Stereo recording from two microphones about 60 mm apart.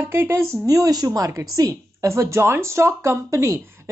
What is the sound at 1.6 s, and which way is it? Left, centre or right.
A woman's voice, right.